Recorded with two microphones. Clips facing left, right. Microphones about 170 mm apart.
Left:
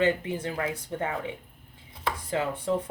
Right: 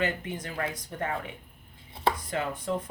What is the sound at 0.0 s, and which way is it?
Speech, 25° left (ahead or behind).